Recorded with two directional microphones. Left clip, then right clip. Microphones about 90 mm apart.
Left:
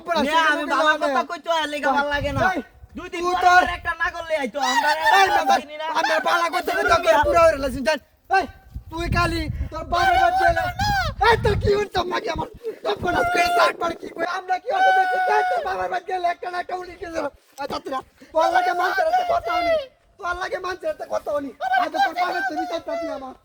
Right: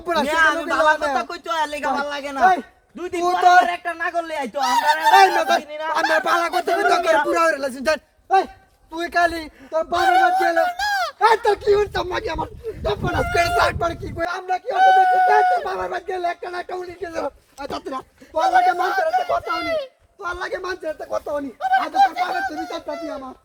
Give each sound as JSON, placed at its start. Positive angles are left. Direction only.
{"t": 0.0, "sound": "a man's voice", "side_deg": -30}
{"t": 9.9, "sound": "speech", "side_deg": -25}
{"t": 12.1, "sound": "speech", "side_deg": 90}
{"t": 13.1, "sound": "speech", "side_deg": -15}
{"t": 17.7, "sound": "speech", "side_deg": 60}
{"t": 18.3, "sound": "speech", "side_deg": -30}
{"t": 20.2, "sound": "a man's voice", "side_deg": -10}
{"t": 21.6, "sound": "speech", "side_deg": -30}